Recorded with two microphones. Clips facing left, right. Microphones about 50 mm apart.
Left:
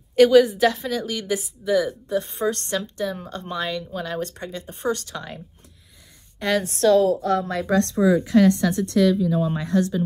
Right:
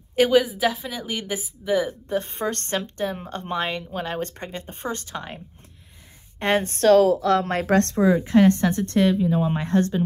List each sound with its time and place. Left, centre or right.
0.1 s a woman's voice: centre
1.0 s a woman's voice: right
6.4 s speech: right
7.2 s speech: right
8.1 s speech: right